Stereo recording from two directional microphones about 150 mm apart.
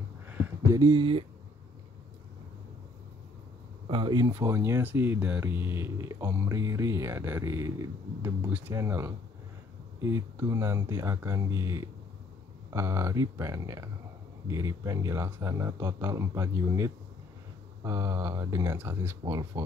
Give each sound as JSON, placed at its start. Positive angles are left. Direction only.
{"t": 0.7, "sound": "speech", "side_deg": -25}
{"t": 3.9, "sound": "speech", "side_deg": -30}